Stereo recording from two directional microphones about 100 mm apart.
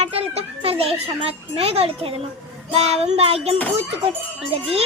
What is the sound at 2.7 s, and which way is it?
Speech, 90° right.